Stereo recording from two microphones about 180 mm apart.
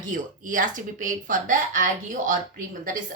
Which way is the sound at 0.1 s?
45° right (ahead or behind).